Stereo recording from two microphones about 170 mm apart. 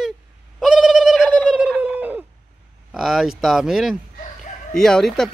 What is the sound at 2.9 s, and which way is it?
Speech, centre (ahead or behind).